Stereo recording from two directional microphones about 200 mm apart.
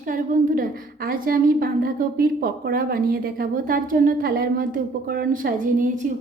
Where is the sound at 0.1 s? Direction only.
45° right (ahead or behind).